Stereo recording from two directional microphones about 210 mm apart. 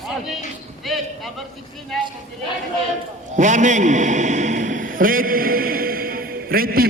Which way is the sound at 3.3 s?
35° right (ahead or behind).